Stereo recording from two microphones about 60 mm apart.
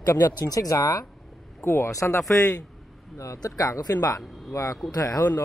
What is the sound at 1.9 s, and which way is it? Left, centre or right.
Speech, left.